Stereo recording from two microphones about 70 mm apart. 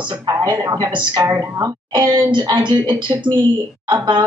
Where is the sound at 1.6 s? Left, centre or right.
Right.